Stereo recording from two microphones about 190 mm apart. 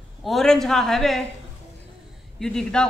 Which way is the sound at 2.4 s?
5° left (ahead or behind).